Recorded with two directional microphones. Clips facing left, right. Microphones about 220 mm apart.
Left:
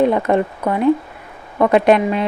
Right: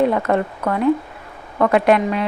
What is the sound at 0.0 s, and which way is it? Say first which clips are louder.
Speech: left 2 dB; 20° left (ahead or behind).